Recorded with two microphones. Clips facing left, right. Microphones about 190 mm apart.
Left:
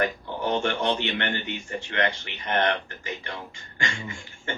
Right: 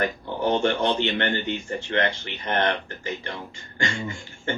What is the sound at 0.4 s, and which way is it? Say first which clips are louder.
A man's voice: right 3 dB; 35° right (ahead or behind).